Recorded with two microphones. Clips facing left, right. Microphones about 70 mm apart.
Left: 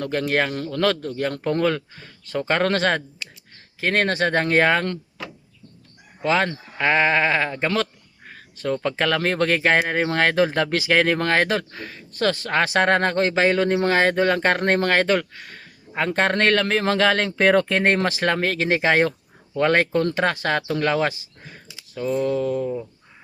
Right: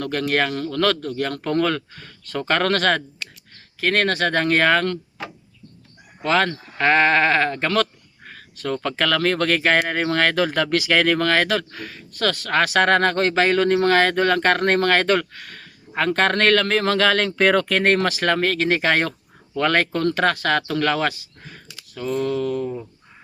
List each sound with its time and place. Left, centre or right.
0.0 s speech: centre
6.2 s speech: centre
8.5 s speech: left
21.4 s a sound: centre
22.4 s speech: centre
22.6 s speech: centre